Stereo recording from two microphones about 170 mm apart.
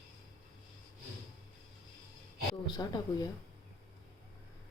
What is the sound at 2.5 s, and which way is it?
Speech, 25° left (ahead or behind).